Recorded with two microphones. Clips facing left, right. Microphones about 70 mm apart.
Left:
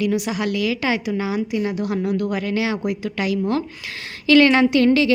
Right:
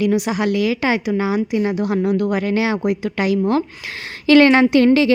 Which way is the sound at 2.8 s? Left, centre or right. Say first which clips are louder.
Right 4 dB; right.